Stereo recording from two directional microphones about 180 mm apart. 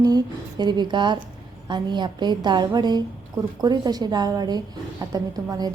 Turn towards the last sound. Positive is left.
turn(degrees=-20)  # may be behind; listen again after turning